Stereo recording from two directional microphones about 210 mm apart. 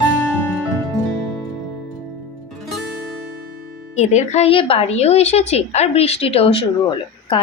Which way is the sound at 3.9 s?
30° left (ahead or behind).